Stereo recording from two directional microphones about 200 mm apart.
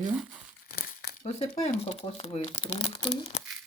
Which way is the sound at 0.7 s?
50° left (ahead or behind).